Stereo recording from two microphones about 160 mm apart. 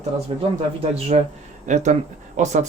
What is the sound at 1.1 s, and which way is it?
Speech, 40° right (ahead or behind).